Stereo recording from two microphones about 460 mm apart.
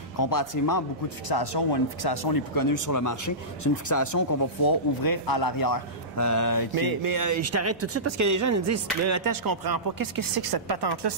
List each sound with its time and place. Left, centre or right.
0.2 s speech: left
1.3 s speech: left
6.7 s speech: right